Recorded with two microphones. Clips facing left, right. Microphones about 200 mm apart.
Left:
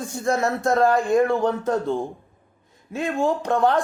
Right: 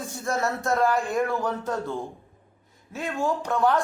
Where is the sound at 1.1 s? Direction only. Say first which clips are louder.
Left 7 dB; 25° left (ahead or behind).